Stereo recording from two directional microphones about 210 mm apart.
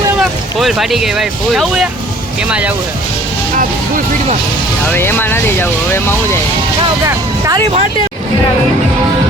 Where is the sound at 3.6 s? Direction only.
40° right (ahead or behind).